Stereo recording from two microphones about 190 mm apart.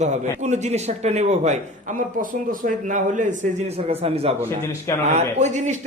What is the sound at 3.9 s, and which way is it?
A man's voice, 30° right (ahead or behind).